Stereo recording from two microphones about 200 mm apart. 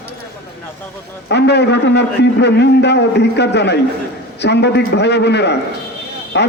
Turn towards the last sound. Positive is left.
turn(degrees=60)  # may be behind; listen again after turning